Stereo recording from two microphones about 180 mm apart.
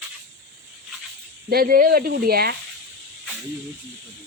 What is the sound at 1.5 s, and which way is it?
Speech, 55° right (ahead or behind).